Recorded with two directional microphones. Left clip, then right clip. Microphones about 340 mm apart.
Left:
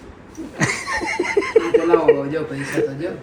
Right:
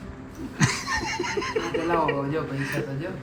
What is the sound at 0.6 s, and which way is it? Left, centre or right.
Laughter, centre.